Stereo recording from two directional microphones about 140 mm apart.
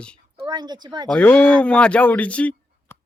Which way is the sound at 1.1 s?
10° left (ahead or behind).